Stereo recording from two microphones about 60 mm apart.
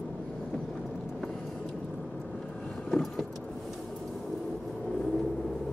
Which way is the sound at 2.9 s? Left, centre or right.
Centre.